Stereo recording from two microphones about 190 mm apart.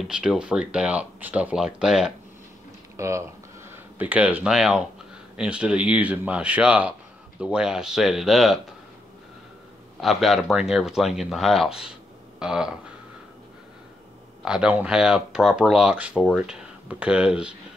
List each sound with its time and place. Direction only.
0.0 s speech: centre (ahead or behind)
3.0 s speech: 15° right (ahead or behind)
9.9 s speech: centre (ahead or behind)
14.4 s speech: 5° right (ahead or behind)